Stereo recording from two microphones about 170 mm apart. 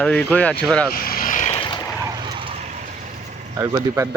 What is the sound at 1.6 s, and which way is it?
Boat, 25° left (ahead or behind).